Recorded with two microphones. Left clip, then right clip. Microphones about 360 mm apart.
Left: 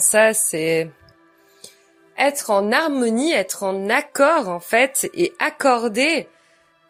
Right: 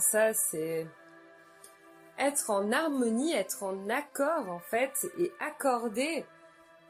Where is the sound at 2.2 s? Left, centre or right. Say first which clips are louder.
Left 12 dB; right.